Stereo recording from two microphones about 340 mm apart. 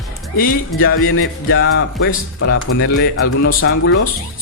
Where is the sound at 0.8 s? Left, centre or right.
Left.